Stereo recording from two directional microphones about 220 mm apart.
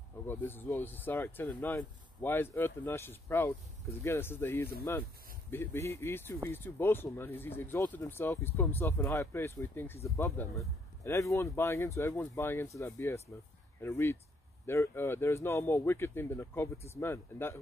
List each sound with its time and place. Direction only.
0.3 s speech: 10° left (ahead or behind)